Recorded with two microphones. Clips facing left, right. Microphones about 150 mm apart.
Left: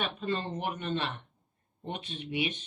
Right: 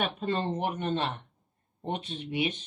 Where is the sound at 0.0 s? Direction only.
45° right (ahead or behind).